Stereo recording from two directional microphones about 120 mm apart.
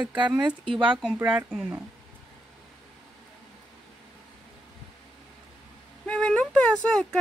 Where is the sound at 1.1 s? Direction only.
15° right (ahead or behind).